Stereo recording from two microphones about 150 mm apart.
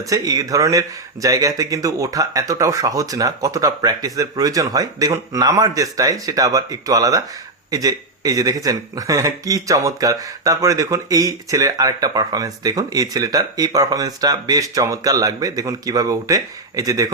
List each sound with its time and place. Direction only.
0.0 s speech: 25° right (ahead or behind)